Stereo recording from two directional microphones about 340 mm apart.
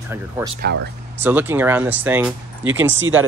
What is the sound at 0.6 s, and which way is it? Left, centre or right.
Speech, right.